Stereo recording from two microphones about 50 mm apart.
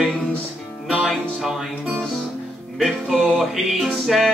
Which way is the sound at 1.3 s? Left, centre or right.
Centre.